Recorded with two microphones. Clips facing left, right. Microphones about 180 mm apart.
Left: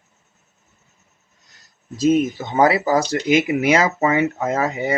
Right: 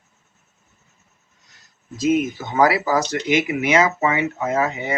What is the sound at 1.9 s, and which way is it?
Speech, 30° left (ahead or behind).